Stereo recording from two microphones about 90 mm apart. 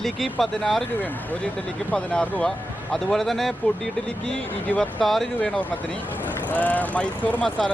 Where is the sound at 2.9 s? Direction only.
5° left (ahead or behind).